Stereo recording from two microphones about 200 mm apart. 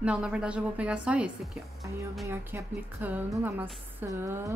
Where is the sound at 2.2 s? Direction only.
10° right (ahead or behind).